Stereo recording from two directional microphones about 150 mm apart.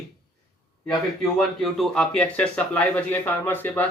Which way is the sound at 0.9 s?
Centre (ahead or behind).